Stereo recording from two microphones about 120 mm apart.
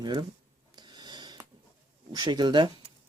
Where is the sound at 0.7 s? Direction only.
35° right (ahead or behind).